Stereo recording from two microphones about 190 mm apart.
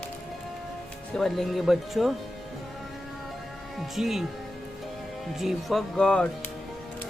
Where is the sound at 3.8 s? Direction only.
Centre (ahead or behind).